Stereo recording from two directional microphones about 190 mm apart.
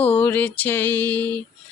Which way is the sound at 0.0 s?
10° left (ahead or behind).